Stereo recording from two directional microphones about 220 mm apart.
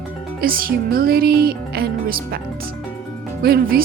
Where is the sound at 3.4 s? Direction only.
45° right (ahead or behind).